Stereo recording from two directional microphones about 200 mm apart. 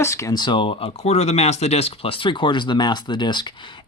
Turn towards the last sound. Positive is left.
turn(degrees=25)  # may be behind; listen again after turning